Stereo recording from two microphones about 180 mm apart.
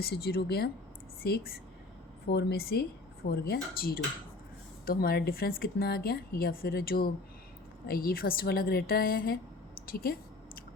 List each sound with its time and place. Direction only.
0.0 s a woman's voice: 60° left (ahead or behind)